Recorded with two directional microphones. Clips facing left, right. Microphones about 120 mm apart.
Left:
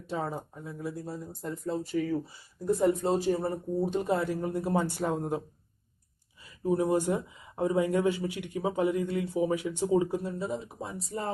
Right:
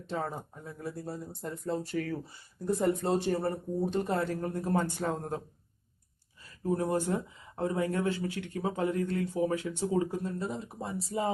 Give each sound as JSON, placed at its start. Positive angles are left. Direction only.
{"t": 0.1, "sound": "speech", "side_deg": 10}
{"t": 6.7, "sound": "speech", "side_deg": 15}
{"t": 10.4, "sound": "speech", "side_deg": 0}